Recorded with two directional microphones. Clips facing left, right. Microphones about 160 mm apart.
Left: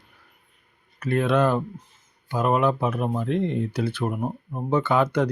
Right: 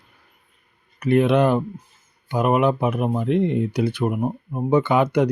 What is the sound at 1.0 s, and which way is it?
Speech, 15° right (ahead or behind).